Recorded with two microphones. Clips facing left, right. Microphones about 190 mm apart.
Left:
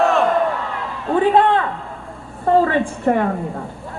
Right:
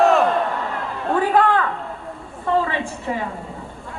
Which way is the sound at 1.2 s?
25° left (ahead or behind).